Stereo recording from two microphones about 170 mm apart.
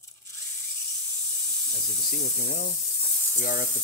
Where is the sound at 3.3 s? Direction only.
55° left (ahead or behind).